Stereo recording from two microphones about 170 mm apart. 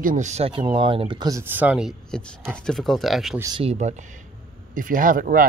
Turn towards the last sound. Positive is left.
turn(degrees=-55)  # may be behind; listen again after turning